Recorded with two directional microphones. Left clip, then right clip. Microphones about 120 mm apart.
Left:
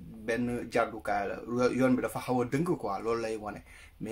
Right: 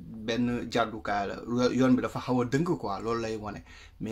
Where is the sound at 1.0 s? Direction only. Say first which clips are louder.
Right 1 dB; 20° right (ahead or behind).